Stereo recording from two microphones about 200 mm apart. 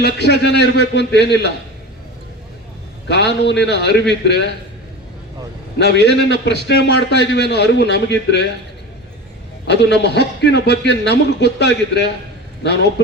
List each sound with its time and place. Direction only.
0.0 s a man's voice: 55° left (ahead or behind)
3.1 s a man's voice: 60° left (ahead or behind)
5.8 s a man's voice: 60° left (ahead or behind)
9.6 s a man's voice: 55° left (ahead or behind)